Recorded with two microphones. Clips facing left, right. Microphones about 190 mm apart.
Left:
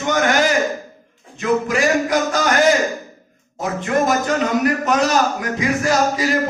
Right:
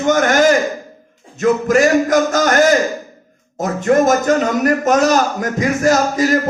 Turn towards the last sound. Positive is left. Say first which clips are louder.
# right 4 dB
turn(degrees=-45)  # may be behind; listen again after turning